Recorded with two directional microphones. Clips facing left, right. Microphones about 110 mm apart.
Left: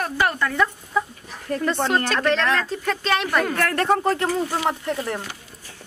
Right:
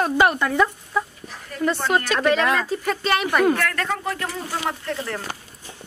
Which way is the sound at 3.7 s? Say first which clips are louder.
Left 6 dB; 40° left (ahead or behind).